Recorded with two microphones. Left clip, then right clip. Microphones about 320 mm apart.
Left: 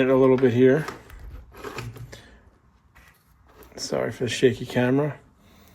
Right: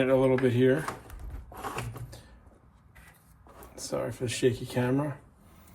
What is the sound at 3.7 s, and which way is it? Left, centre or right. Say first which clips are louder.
Speech: left 6 dB; left.